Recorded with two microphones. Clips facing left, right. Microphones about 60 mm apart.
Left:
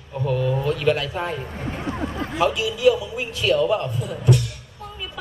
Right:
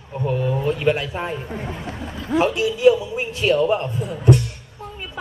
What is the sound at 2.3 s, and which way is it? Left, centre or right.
A man's voice, right.